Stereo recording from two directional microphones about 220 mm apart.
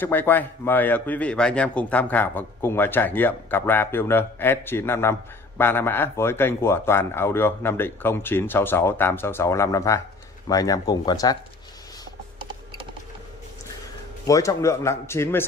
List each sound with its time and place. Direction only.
0.0 s a man's voice: 10° left (ahead or behind)
14.2 s a man's voice: 15° left (ahead or behind)